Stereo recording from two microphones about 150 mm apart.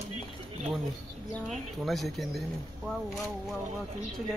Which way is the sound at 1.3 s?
Centre (ahead or behind).